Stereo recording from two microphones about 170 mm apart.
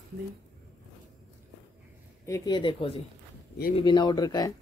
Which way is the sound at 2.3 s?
20° left (ahead or behind).